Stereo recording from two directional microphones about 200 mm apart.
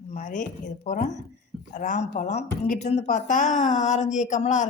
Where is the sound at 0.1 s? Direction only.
40° left (ahead or behind).